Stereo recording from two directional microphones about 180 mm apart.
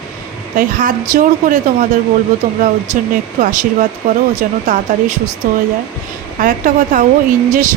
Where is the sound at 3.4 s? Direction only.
45° right (ahead or behind).